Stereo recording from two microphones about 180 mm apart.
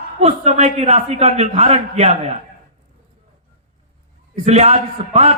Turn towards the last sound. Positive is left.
turn(degrees=-35)  # may be behind; listen again after turning